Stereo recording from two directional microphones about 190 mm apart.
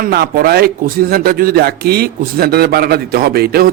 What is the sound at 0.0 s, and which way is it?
A man's voice, 55° right (ahead or behind).